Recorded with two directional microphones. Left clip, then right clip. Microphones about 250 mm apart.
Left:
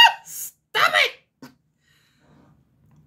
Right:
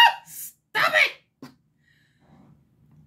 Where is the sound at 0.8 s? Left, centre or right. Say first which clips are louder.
Left 2 dB; left.